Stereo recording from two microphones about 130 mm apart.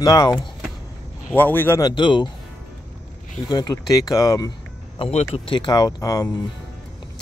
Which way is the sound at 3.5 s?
30° left (ahead or behind).